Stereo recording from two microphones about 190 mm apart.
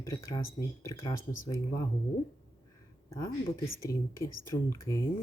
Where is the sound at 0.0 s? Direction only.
15° left (ahead or behind).